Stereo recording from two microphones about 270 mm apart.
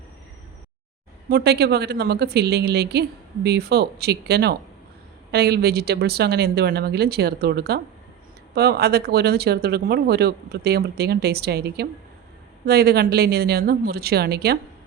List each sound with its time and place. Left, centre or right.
1.3 s speech: right